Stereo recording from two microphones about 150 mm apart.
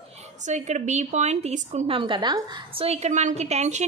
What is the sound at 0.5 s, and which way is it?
A woman's voice, 50° right (ahead or behind).